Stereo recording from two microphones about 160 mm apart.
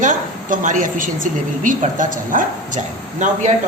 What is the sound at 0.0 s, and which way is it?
A woman's voice, 50° right (ahead or behind).